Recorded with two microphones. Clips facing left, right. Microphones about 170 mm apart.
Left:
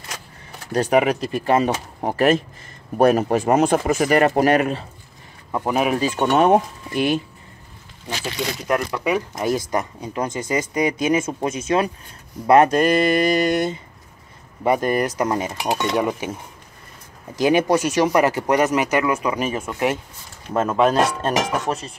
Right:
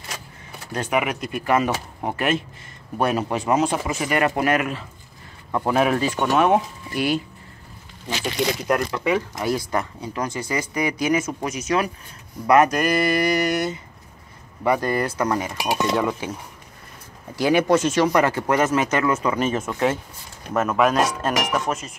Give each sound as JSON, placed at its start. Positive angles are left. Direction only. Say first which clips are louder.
{"t": 0.7, "sound": "speech", "louder": "left 6 dB", "side_deg": 35}
{"t": 5.5, "sound": "speech", "louder": "even", "side_deg": 10}
{"t": 6.3, "sound": "speech", "louder": "left 3 dB", "side_deg": 35}
{"t": 6.9, "sound": "speech", "louder": "left 3 dB", "side_deg": 20}
{"t": 8.6, "sound": "speech", "louder": "even", "side_deg": 0}
{"t": 9.0, "sound": "speech", "louder": "left 1 dB", "side_deg": 15}
{"t": 17.4, "sound": "speech", "louder": "left 1 dB", "side_deg": 20}
{"t": 20.5, "sound": "speech", "louder": "left 2 dB", "side_deg": 30}